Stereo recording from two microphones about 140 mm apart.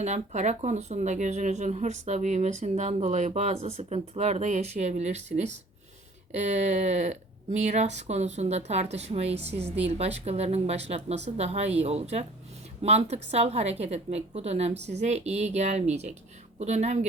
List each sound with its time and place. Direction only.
0.0 s speech: 55° right (ahead or behind)